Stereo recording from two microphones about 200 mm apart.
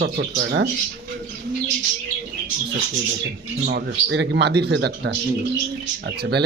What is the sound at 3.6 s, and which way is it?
A man's voice, 60° right (ahead or behind).